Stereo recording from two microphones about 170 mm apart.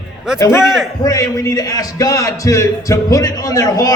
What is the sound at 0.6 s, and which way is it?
Speech, 5° right (ahead or behind).